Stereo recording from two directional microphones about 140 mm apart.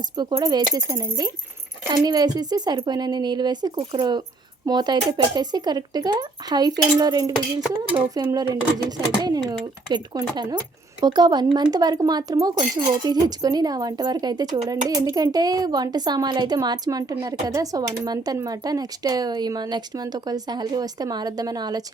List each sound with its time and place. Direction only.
0.2 s speech: 30° right (ahead or behind)